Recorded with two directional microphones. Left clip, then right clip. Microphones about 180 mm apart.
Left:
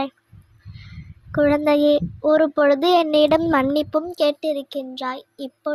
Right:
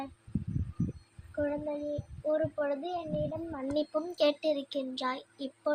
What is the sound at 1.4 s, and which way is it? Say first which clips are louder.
Child singing: left 17 dB; 70° left (ahead or behind).